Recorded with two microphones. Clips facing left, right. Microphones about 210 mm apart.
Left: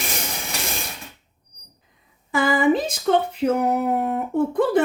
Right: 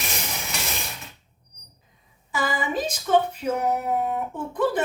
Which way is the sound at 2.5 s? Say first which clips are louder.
Left 10 dB; 60° left (ahead or behind).